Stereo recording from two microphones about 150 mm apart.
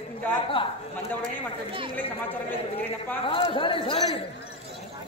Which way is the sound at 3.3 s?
35° left (ahead or behind).